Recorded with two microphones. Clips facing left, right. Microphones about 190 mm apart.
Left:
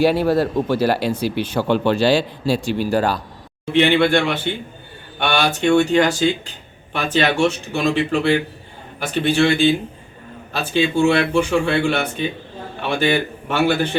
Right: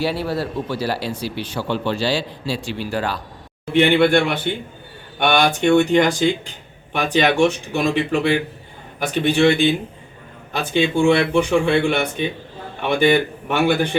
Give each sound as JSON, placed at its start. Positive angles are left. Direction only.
{"t": 0.0, "sound": "speech", "side_deg": 50}
{"t": 3.8, "sound": "a man's voice", "side_deg": -15}